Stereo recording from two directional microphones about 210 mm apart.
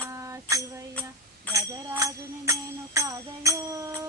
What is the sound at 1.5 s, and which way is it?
Music, 15° right (ahead or behind).